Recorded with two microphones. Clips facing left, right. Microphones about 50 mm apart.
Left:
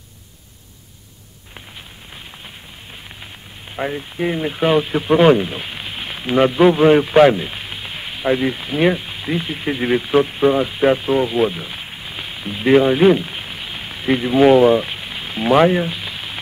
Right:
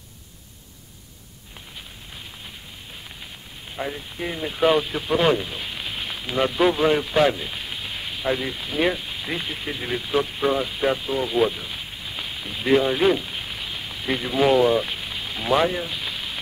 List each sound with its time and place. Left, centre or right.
3.7 s speech: left
9.3 s speech: centre
9.6 s speech: left
11.2 s a sound: left
13.7 s a sound: left
14.0 s speech: left
15.9 s frying: left